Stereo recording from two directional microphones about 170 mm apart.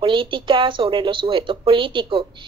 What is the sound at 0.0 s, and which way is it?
Speech, 30° right (ahead or behind).